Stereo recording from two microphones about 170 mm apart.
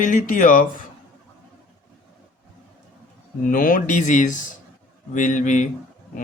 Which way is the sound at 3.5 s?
55° left (ahead or behind).